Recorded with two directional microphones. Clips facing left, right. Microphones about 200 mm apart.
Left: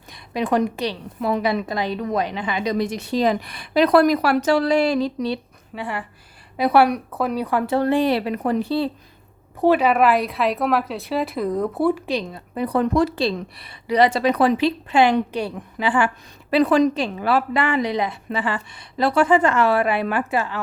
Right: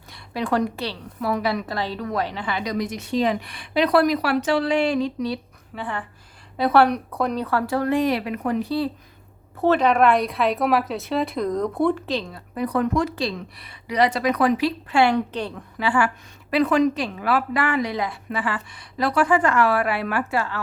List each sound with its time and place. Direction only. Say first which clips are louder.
0.1 s a woman's voice: left 3 dB; 20° left (ahead or behind)
2.7 s a woman's voice: right 1 dB; 30° left (ahead or behind)
5.7 s a woman's voice: left 2 dB; 10° left (ahead or behind)
7.8 s a woman's voice: left 3 dB; 30° left (ahead or behind)
9.6 s a woman's voice: left 1 dB; 10° left (ahead or behind)
12.5 s a woman's voice: left 3 dB; 30° left (ahead or behind); by 15.6 s 10° left (ahead or behind)
15.8 s a woman's voice: left 1 dB; 20° left (ahead or behind)